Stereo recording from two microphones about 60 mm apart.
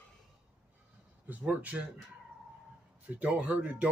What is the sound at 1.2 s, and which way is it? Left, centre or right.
Speech, right.